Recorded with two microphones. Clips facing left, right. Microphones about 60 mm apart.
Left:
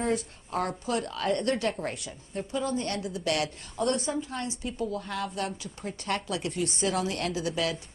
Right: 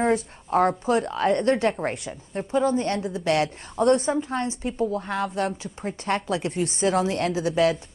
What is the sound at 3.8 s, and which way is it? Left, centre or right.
A woman's voice, right.